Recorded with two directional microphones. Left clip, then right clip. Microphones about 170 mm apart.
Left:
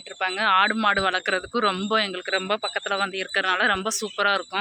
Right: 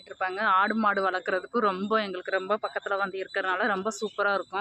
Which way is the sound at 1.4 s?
25° left (ahead or behind).